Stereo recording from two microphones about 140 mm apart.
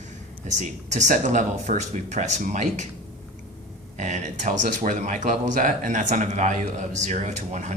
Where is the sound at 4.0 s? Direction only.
60° right (ahead or behind).